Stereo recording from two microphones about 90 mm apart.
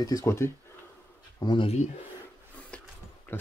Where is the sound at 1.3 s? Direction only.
55° left (ahead or behind).